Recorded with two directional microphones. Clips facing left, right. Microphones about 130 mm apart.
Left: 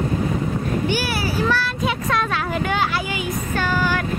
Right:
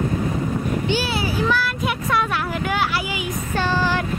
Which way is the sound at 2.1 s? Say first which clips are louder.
Right 2 dB; 10° right (ahead or behind).